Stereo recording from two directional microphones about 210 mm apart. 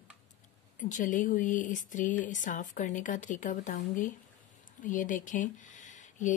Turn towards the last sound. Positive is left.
turn(degrees=35)  # may be behind; listen again after turning